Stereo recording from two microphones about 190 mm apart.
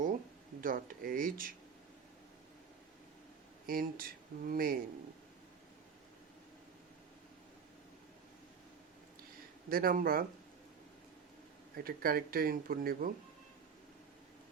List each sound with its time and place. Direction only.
0.6 s speech: 50° right (ahead or behind)
3.7 s speech: 50° right (ahead or behind)
9.6 s speech: 50° right (ahead or behind)
11.8 s speech: 50° right (ahead or behind)